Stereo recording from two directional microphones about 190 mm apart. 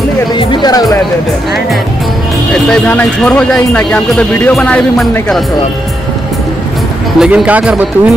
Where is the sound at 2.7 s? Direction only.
5° left (ahead or behind).